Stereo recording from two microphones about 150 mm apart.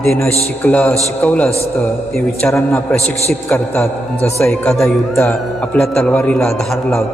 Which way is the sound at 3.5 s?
15° left (ahead or behind).